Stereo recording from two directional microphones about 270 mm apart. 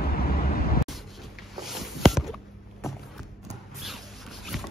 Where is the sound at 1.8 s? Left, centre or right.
Centre.